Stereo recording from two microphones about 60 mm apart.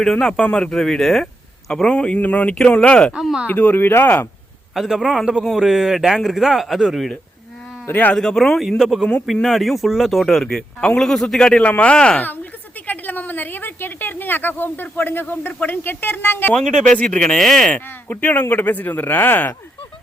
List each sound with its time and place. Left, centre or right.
0.0 s speech: centre
1.7 s speech: centre
3.4 s speech: left
4.7 s speech: centre
7.9 s speech: left
8.1 s speech: centre
8.8 s speech: centre
11.6 s speech: left
12.9 s speech: left
16.9 s speech: centre
17.7 s speech: left